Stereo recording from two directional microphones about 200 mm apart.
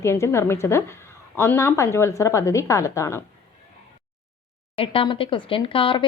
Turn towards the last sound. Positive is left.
turn(degrees=25)  # may be behind; listen again after turning